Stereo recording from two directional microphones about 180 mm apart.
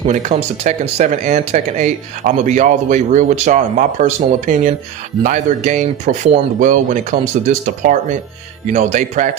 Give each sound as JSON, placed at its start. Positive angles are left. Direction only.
{"t": 0.1, "sound": "speech", "side_deg": -40}